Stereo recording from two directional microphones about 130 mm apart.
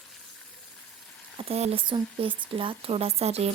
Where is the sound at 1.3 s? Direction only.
50° right (ahead or behind).